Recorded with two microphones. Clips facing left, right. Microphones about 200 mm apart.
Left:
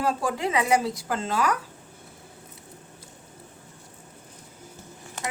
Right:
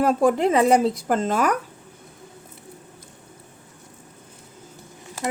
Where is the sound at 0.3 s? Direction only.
55° right (ahead or behind).